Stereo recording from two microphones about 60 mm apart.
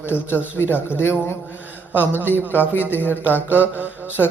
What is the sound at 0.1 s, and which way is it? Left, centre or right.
Speech, left.